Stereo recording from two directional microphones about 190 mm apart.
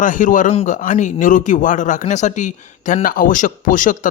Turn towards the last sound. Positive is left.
turn(degrees=45)  # may be behind; listen again after turning